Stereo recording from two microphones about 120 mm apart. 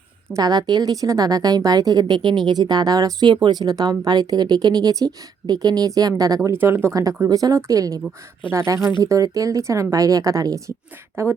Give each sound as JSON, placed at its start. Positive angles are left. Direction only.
{"t": 0.3, "sound": "a woman's voice", "side_deg": -35}